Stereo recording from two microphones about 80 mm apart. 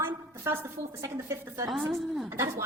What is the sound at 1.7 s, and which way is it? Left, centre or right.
Speech, centre.